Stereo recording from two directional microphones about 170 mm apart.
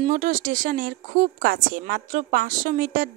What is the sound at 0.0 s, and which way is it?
A woman's voice, 50° right (ahead or behind).